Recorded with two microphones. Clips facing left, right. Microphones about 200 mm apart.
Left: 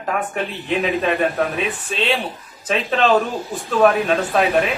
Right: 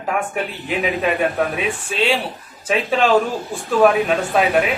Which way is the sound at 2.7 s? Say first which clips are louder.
Right 1 dB; 10° right (ahead or behind).